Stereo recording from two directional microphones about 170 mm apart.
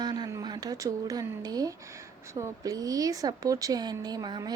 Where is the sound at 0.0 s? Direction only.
25° right (ahead or behind).